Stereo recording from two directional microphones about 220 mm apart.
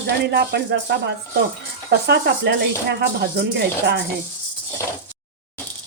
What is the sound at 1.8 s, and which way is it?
Speech, 50° right (ahead or behind).